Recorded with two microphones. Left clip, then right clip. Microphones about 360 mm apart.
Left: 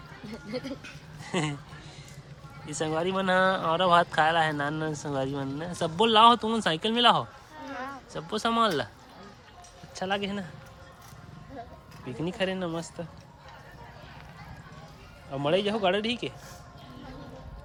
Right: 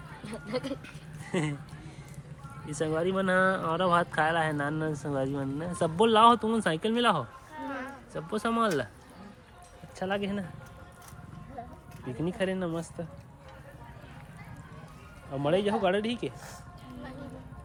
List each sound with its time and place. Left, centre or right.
1.3 s speech: centre
2.6 s speech: centre
9.9 s speech: centre
12.0 s speech: centre
15.3 s speech: centre